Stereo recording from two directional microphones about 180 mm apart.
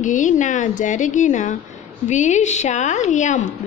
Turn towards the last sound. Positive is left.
turn(degrees=45)  # may be behind; listen again after turning